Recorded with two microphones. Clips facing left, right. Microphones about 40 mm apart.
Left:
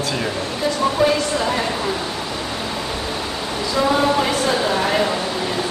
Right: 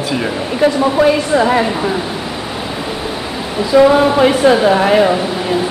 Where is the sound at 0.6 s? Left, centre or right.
Right.